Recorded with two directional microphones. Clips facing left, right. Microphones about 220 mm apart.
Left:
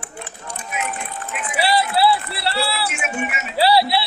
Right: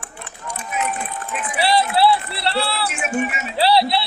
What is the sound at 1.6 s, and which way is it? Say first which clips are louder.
Run: right 1 dB; 5° left (ahead or behind).